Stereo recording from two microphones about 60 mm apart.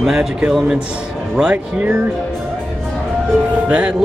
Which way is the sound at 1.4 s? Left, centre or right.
Right.